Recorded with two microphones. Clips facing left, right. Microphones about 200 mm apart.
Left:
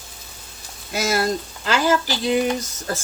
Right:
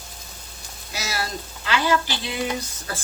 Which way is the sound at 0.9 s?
50° left (ahead or behind).